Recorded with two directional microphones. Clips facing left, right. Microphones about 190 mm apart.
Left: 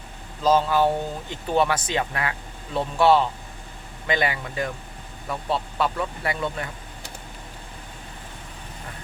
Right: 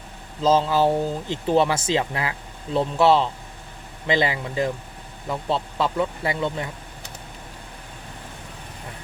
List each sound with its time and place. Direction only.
0.4 s speech: 25° right (ahead or behind)